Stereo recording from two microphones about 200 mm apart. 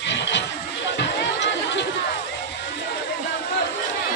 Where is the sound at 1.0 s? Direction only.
60° left (ahead or behind).